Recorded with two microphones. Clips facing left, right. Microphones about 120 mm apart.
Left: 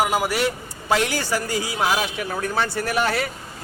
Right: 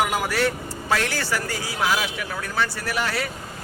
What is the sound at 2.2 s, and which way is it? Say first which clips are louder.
Speech: left 3 dB; 35° left (ahead or behind).